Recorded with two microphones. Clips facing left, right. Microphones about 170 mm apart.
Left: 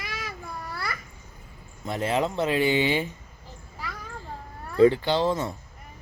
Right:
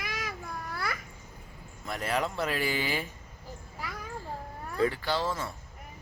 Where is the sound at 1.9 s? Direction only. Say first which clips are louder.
Left 5 dB; 25° left (ahead or behind).